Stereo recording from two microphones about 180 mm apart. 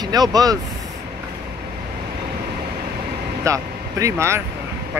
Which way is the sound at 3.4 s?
15° right (ahead or behind).